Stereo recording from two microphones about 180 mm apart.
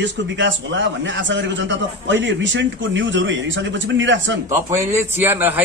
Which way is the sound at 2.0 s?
85° right.